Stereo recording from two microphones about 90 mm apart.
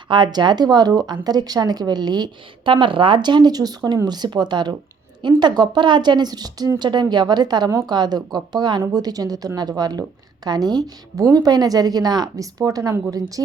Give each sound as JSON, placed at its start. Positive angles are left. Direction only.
{"t": 0.1, "sound": "a woman's voice", "side_deg": -55}